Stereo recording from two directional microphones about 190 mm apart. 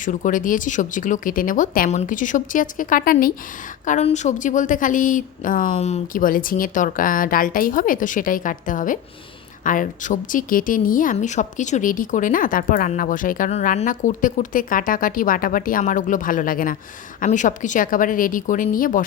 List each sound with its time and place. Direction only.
0.0 s speech: 40° left (ahead or behind)
3.8 s speech: 40° left (ahead or behind)